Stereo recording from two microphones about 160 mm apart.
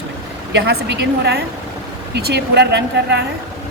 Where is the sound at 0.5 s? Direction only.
90° right.